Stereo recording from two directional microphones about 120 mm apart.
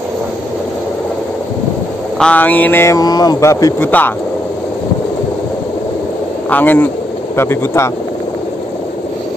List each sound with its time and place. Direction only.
2.1 s speech: 10° left (ahead or behind); by 3.9 s 25° left (ahead or behind)
6.5 s speech: 15° left (ahead or behind)